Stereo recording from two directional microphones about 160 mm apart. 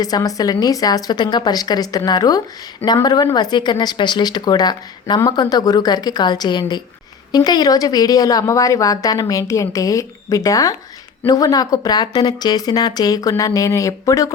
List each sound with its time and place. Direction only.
0.0 s speech: 25° left (ahead or behind)